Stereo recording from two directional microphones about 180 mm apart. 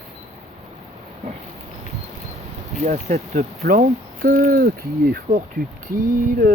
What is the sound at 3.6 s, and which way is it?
Speech, 55° right (ahead or behind).